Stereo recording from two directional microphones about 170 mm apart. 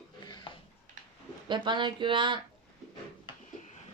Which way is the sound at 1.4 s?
25° right (ahead or behind).